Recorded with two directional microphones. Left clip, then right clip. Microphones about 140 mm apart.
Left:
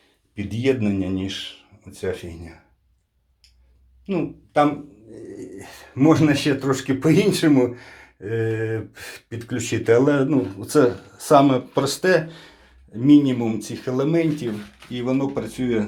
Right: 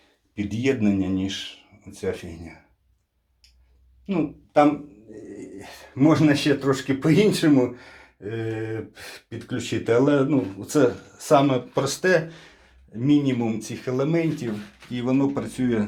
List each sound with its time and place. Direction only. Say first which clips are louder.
0.3 s speech: left 2 dB; 5° left (ahead or behind)
4.0 s speech: left 1 dB; 10° left (ahead or behind)
5.5 s speech: left 1 dB; 20° left (ahead or behind)
14.9 s speech: even; 5° left (ahead or behind)